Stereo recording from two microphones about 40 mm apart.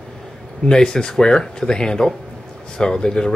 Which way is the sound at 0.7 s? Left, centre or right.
Centre.